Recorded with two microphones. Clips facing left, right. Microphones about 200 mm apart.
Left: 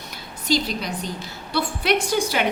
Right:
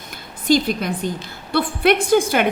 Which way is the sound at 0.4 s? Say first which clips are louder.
Right 6 dB; 50° right (ahead or behind).